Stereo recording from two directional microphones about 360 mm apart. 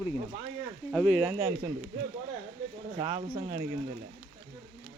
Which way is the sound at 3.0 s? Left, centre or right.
Centre.